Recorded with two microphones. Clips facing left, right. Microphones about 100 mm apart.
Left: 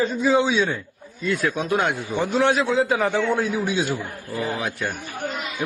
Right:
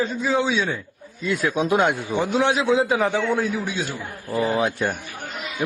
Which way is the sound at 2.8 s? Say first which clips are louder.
Even; centre (ahead or behind).